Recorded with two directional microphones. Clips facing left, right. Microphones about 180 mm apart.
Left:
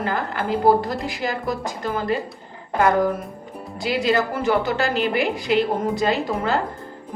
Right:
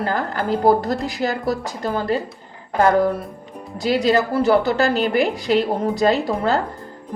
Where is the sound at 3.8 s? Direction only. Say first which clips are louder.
Right 3 dB; 40° right (ahead or behind).